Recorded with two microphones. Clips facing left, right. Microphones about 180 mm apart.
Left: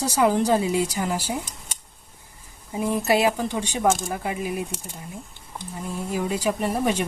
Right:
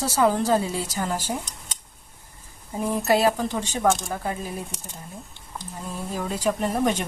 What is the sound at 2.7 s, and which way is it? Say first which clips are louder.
Speech: even; 10° left (ahead or behind).